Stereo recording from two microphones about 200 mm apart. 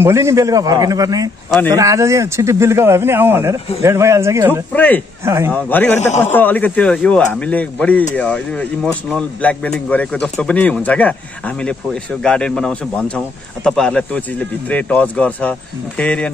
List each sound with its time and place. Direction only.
0.0 s speech: 15° right (ahead or behind)
4.7 s speech: 10° left (ahead or behind)
5.2 s speech: 15° right (ahead or behind)
5.5 s speech: 10° left (ahead or behind)